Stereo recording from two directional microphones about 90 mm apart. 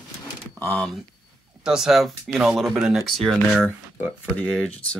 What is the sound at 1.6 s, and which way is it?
Speech, 5° right (ahead or behind).